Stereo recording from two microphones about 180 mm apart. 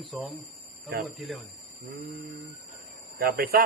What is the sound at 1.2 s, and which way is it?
Speech, centre (ahead or behind).